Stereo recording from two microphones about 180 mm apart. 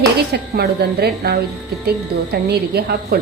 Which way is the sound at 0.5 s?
60° right (ahead or behind).